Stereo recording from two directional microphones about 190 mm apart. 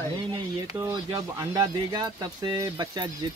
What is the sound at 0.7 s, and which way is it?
Speech, 20° right (ahead or behind).